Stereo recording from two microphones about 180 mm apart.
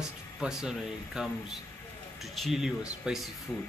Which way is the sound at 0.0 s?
5° right (ahead or behind).